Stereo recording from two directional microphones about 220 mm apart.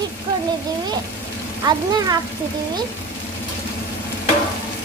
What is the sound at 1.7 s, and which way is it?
Speech, 15° right (ahead or behind).